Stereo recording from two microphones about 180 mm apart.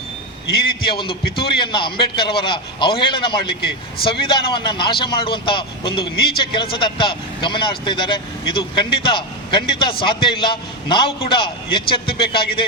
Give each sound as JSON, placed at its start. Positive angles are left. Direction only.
{"t": 0.9, "sound": "speech", "side_deg": 25}